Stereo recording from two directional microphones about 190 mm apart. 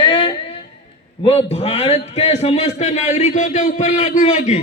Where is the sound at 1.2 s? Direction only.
30° left (ahead or behind).